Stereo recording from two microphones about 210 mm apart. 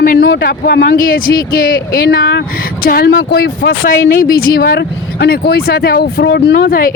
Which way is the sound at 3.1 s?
55° left (ahead or behind).